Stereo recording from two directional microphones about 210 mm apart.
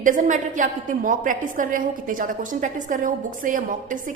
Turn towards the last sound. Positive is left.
turn(degrees=-40)  # may be behind; listen again after turning